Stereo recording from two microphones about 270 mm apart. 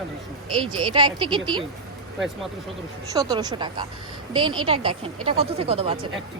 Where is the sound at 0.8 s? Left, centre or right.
Centre.